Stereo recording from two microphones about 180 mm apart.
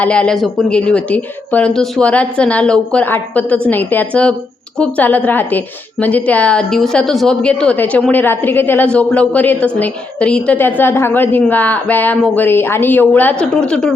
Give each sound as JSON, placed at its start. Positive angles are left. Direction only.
{"t": 0.0, "sound": "a woman's voice", "side_deg": 5}